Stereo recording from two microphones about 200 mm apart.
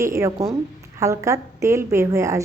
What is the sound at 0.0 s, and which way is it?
A woman's voice, 15° right (ahead or behind).